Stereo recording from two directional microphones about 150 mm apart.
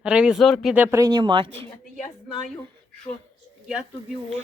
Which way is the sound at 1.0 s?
30° right (ahead or behind).